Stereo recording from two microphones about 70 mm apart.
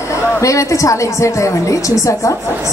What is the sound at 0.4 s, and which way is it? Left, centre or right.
A woman's voice, left.